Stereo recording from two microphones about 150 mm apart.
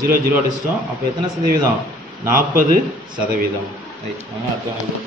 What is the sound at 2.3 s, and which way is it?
Speech, 65° right (ahead or behind).